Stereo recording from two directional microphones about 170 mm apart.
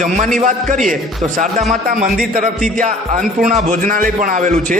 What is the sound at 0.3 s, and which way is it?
Speech, 45° right (ahead or behind).